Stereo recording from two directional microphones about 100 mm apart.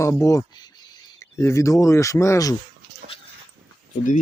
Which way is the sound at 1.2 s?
30° left (ahead or behind).